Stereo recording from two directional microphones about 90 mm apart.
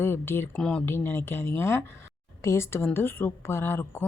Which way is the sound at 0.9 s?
25° left (ahead or behind).